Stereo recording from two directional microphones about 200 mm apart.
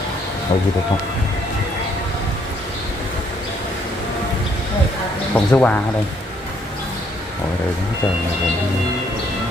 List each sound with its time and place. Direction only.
0.5 s speech: 25° left (ahead or behind)
5.3 s speech: 5° left (ahead or behind)